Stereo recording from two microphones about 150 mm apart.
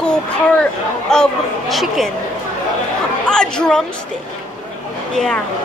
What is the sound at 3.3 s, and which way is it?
Speech, 5° left (ahead or behind).